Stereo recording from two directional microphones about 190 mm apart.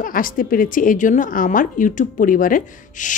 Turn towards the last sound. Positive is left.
turn(degrees=45)  # may be behind; listen again after turning